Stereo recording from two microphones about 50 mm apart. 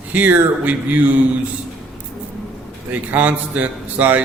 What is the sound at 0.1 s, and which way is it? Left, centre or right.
A man's voice, right.